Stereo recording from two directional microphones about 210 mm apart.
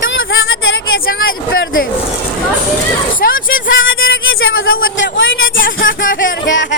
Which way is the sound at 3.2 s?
40° left (ahead or behind).